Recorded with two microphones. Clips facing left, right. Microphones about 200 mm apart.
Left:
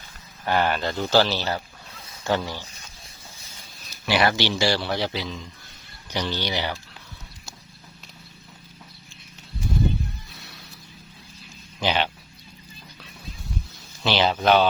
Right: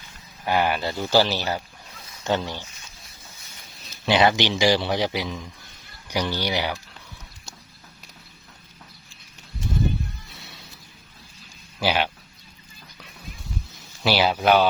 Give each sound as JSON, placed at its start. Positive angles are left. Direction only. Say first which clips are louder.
{"t": 0.4, "sound": "speech", "louder": "even", "side_deg": -10}
{"t": 3.8, "sound": "speech", "louder": "right 3 dB", "side_deg": -20}
{"t": 10.3, "sound": "a sound", "louder": "even", "side_deg": -25}
{"t": 11.8, "sound": "speech", "louder": "right 1 dB", "side_deg": -10}
{"t": 14.0, "sound": "speech", "louder": "right 1 dB", "side_deg": -10}